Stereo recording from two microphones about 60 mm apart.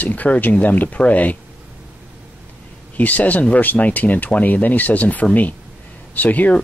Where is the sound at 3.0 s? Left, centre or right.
Left.